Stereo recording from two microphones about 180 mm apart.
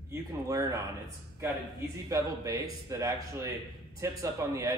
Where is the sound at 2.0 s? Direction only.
20° right (ahead or behind).